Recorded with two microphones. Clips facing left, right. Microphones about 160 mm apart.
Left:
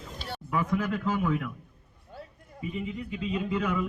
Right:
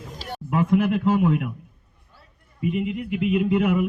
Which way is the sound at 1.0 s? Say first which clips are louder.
Right 8 dB; 30° right (ahead or behind).